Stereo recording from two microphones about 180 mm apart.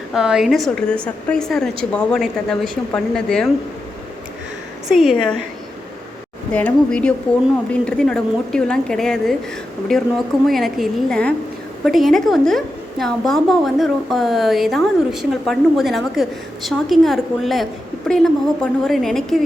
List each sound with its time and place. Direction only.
0.1 s a woman's voice: 5° right (ahead or behind)
4.9 s a woman's voice: centre (ahead or behind)
6.5 s a woman's voice: 5° left (ahead or behind)